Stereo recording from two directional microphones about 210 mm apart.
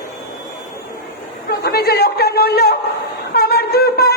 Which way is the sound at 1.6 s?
50° left (ahead or behind).